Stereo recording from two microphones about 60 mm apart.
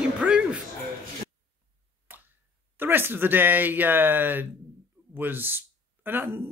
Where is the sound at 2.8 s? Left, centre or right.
Right.